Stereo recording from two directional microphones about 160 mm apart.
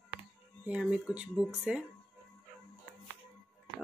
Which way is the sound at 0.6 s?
5° right (ahead or behind).